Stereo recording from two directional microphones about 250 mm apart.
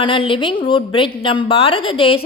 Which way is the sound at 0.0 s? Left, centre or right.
Centre.